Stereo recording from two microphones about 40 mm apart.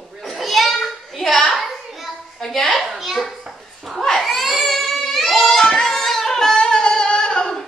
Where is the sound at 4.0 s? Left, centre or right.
Centre; by 7.5 s left.